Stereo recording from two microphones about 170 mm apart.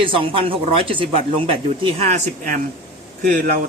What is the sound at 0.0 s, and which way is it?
Speech, 30° right (ahead or behind).